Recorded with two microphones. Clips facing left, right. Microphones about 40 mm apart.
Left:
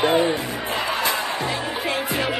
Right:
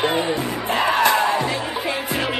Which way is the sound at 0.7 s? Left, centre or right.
Right.